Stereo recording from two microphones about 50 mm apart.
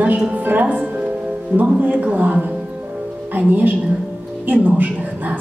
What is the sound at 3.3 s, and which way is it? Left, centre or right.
A woman's voice, right.